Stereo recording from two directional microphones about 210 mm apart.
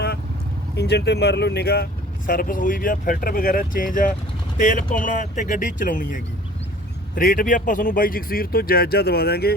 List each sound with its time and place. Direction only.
0.8 s speech: 50° left (ahead or behind)